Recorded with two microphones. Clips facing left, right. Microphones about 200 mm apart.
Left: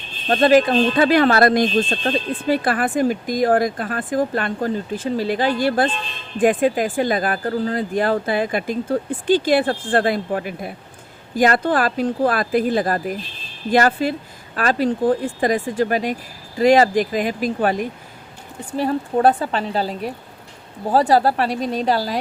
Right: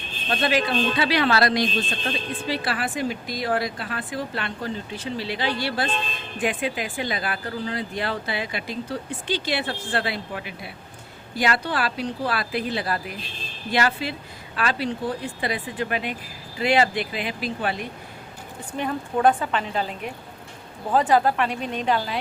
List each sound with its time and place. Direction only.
0.3 s speech: 45° left (ahead or behind)